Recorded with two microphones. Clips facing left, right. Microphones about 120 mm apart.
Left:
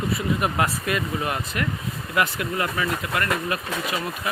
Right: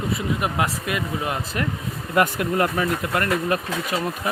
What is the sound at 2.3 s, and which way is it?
Speech, 45° right (ahead or behind).